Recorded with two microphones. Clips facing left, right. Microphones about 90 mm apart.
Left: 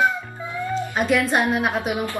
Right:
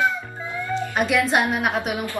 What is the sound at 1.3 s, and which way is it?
Speech, 5° right (ahead or behind).